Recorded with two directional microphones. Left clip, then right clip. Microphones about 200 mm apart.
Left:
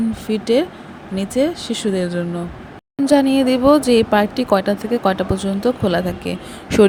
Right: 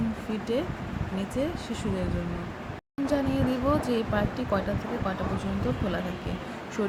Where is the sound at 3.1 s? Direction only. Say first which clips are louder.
Left 13 dB; 40° left (ahead or behind).